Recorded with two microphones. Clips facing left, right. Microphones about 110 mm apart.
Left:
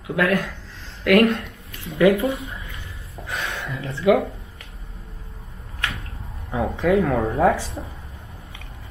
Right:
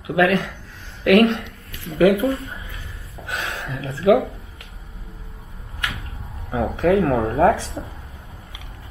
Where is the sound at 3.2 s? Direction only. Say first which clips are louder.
Right 1 dB; 15° right (ahead or behind).